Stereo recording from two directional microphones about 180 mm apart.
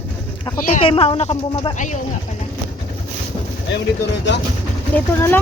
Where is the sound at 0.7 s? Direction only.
30° left (ahead or behind).